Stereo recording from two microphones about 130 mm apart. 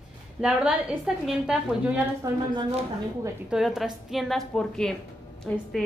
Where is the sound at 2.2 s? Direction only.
25° right (ahead or behind).